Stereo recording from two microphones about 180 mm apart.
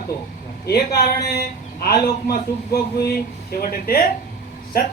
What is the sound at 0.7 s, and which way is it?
A man's voice, 60° left (ahead or behind).